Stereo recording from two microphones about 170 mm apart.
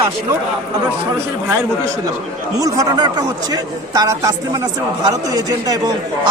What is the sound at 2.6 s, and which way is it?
A man's voice, 20° right (ahead or behind).